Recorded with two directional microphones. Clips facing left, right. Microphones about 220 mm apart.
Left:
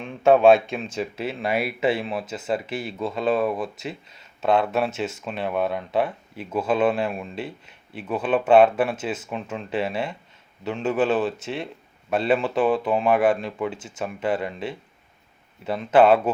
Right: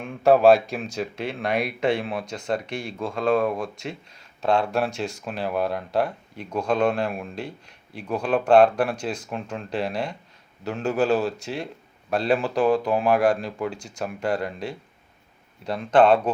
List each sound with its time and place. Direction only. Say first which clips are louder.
0.0 s a man's voice: left 1 dB; centre (ahead or behind)